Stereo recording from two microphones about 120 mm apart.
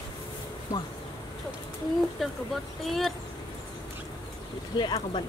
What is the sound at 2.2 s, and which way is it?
Speech, centre (ahead or behind).